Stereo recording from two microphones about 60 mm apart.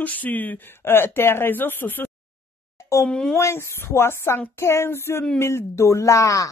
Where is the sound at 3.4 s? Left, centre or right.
Left.